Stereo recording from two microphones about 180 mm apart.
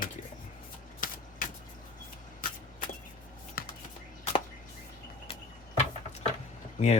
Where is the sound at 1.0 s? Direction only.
50° left (ahead or behind).